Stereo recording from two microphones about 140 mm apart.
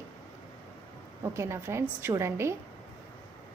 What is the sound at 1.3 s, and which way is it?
A woman's voice, 20° right (ahead or behind).